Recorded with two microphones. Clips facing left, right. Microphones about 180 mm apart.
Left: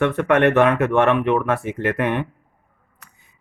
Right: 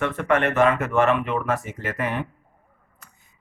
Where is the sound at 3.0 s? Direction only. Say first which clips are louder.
Left 3 dB; 65° left (ahead or behind).